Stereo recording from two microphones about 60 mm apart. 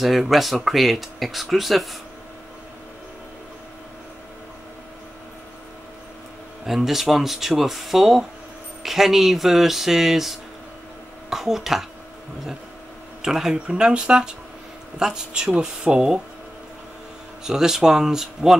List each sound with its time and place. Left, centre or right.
0.0 s speech: centre
6.6 s speech: centre
13.2 s speech: centre
17.5 s speech: centre